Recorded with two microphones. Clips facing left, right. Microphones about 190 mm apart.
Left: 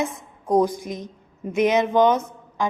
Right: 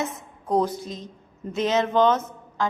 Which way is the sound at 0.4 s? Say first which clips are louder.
Left 3 dB; 15° left (ahead or behind).